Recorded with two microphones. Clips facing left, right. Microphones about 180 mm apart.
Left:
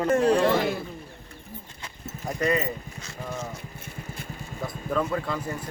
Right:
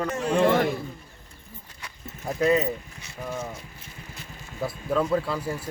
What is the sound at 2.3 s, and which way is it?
Speech, centre (ahead or behind).